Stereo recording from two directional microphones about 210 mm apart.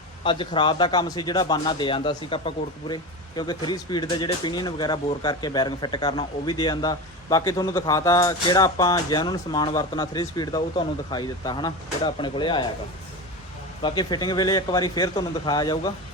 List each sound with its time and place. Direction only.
0.3 s speech: 25° left (ahead or behind)
13.8 s speech: 20° left (ahead or behind)